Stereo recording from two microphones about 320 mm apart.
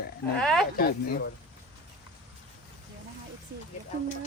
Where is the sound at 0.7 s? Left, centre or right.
Left.